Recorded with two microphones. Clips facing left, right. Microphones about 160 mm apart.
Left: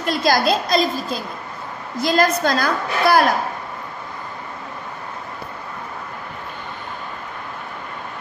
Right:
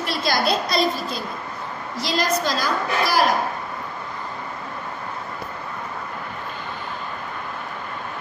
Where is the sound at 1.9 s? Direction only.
50° left (ahead or behind).